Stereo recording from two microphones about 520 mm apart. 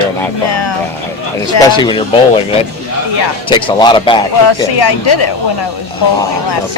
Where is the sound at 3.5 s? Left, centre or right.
Centre.